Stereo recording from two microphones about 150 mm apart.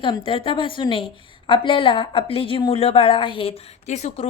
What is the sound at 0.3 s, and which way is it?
A woman's voice, 35° left (ahead or behind).